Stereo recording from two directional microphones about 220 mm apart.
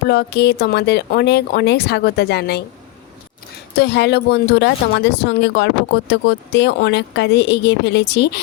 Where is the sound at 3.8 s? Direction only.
50° left (ahead or behind).